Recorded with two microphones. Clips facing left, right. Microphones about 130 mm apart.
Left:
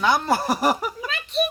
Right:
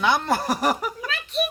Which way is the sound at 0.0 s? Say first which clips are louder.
Left 1 dB; centre (ahead or behind).